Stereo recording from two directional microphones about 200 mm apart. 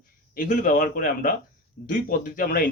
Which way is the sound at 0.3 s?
40° left (ahead or behind).